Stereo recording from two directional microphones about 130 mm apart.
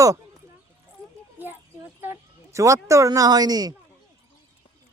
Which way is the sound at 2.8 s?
25° right (ahead or behind).